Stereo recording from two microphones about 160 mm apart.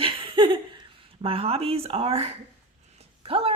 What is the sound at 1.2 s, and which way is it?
A woman's voice, 35° right (ahead or behind).